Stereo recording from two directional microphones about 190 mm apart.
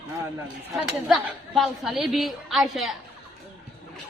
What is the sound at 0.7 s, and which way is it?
A woman's voice, centre (ahead or behind).